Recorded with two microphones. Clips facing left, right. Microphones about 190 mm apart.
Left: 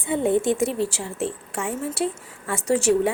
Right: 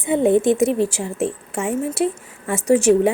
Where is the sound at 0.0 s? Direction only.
20° right (ahead or behind).